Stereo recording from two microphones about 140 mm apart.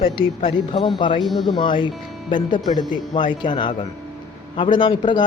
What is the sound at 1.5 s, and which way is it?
Speech, 35° left (ahead or behind).